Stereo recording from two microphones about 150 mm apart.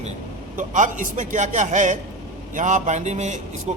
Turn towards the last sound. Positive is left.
turn(degrees=-50)  # may be behind; listen again after turning